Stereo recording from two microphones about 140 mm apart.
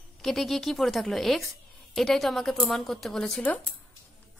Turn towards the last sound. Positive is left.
turn(degrees=5)  # may be behind; listen again after turning